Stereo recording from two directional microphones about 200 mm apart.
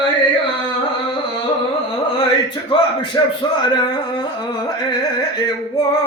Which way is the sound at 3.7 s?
20° left (ahead or behind).